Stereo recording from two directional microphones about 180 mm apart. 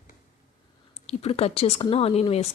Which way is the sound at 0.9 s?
35° left (ahead or behind).